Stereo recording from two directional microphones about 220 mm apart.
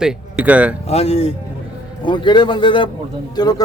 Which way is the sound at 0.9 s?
30° left (ahead or behind).